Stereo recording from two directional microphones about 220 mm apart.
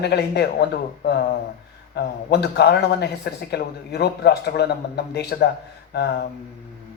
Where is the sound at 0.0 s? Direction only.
50° left (ahead or behind).